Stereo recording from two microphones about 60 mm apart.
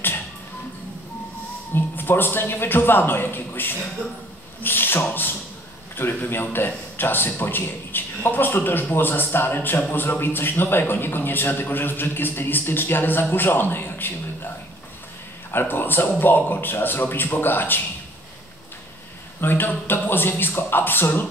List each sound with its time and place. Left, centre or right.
1.7 s a man's voice: left
15.6 s a man's voice: left
19.4 s a man's voice: left